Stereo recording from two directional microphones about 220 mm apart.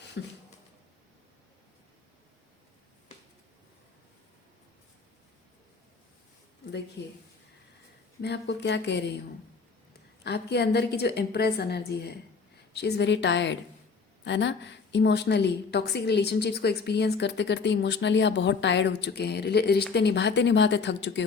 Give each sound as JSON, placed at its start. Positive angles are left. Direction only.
{"t": 0.2, "sound": "a sound", "side_deg": 55}
{"t": 7.0, "sound": "a woman's voice", "side_deg": 50}
{"t": 8.2, "sound": "a woman's voice", "side_deg": 50}
{"t": 10.2, "sound": "a woman's voice", "side_deg": 50}